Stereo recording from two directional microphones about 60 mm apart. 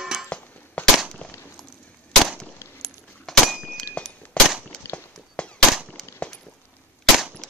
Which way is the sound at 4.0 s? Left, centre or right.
Left.